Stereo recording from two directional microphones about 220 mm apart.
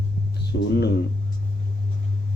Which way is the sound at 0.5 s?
45° left (ahead or behind).